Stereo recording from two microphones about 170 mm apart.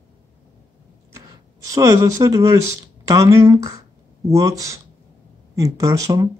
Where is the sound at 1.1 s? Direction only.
20° right (ahead or behind).